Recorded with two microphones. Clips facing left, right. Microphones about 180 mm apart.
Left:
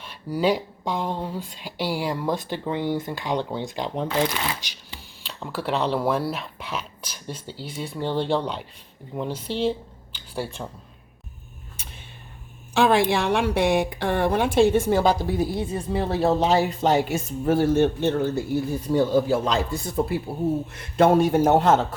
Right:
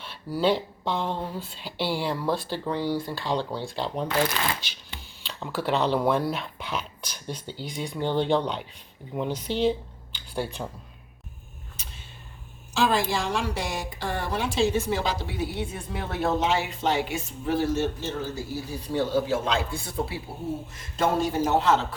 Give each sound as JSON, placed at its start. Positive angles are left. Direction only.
{"t": 0.0, "sound": "speech", "side_deg": 10}
{"t": 4.4, "sound": "speech", "side_deg": 5}
{"t": 11.8, "sound": "a sound", "side_deg": 55}
{"t": 12.7, "sound": "a woman's voice", "side_deg": 60}
{"t": 18.9, "sound": "a woman's voice", "side_deg": 45}
{"t": 20.7, "sound": "a woman's voice", "side_deg": 60}